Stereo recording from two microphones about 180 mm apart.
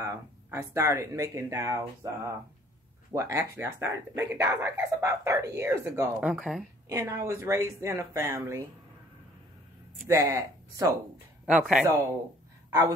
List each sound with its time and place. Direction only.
0.0 s speech: 15° right (ahead or behind)
6.9 s speech: 15° right (ahead or behind)
10.0 s speech: 15° right (ahead or behind)
11.4 s speech: 5° right (ahead or behind)